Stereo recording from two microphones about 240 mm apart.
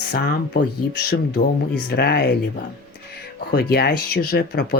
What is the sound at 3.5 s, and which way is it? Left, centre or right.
Speech, left.